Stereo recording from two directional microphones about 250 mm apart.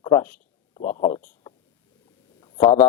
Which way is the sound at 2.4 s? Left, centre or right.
Left.